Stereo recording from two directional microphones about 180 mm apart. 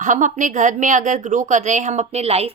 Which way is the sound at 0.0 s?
45° right (ahead or behind).